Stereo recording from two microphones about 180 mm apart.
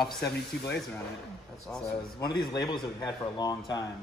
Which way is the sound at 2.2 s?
25° left (ahead or behind).